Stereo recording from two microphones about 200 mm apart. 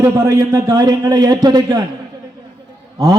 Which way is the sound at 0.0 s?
15° right (ahead or behind).